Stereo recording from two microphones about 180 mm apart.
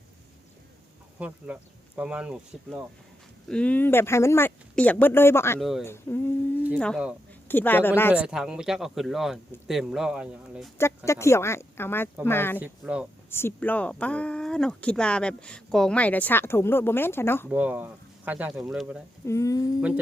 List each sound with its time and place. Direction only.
1.5 s speech: 10° right (ahead or behind)
3.5 s speech: 5° left (ahead or behind)
5.5 s speech: centre (ahead or behind)
5.8 s speech: 10° left (ahead or behind)
8.1 s speech: 5° right (ahead or behind)
10.8 s speech: 15° left (ahead or behind)
12.5 s speech: 10° right (ahead or behind)
13.3 s speech: 10° left (ahead or behind)
17.5 s speech: 10° right (ahead or behind)
19.2 s speech: 15° left (ahead or behind)